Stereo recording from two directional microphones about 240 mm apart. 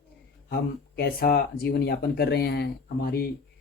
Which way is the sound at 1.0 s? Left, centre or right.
Left.